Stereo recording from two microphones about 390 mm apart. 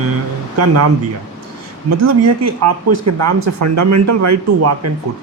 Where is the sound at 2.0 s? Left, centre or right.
Right.